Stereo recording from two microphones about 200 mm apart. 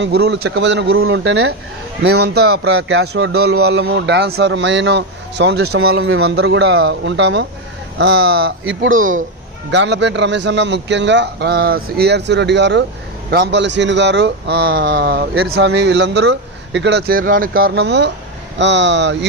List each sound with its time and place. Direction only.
0.0 s a man's voice: 55° right (ahead or behind); by 1.5 s 80° right
2.0 s a man's voice: 55° right (ahead or behind)
2.7 s a man's voice: 75° right (ahead or behind)
6.0 s a man's voice: 90° right
6.3 s a man's voice: 65° right (ahead or behind)
9.7 s a man's voice: 60° right (ahead or behind)